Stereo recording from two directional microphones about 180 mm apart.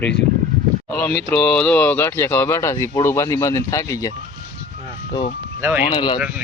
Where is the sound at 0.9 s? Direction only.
5° left (ahead or behind).